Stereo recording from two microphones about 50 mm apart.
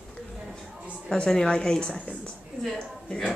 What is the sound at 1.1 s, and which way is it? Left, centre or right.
Speech, centre.